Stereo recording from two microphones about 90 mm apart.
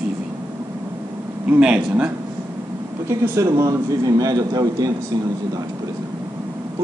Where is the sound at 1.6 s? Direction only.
15° right (ahead or behind).